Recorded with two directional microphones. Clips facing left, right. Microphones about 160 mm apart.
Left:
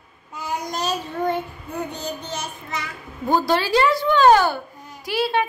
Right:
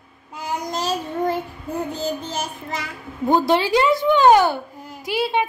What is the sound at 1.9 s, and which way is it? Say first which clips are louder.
Child singing: right 4 dB; 90° right.